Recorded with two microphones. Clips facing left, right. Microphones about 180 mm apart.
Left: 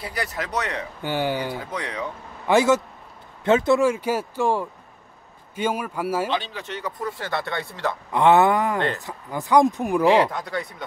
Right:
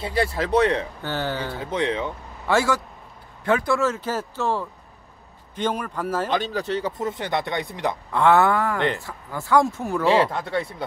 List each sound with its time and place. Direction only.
0.0 s speech: 25° right (ahead or behind)
1.0 s speech: 15° left (ahead or behind)
1.7 s speech: 25° right (ahead or behind)
2.4 s a man's voice: 20° left (ahead or behind)
6.2 s speech: 45° right (ahead or behind)
7.0 s speech: 20° right (ahead or behind)
8.1 s speech: 20° left (ahead or behind)
10.3 s speech: 30° right (ahead or behind)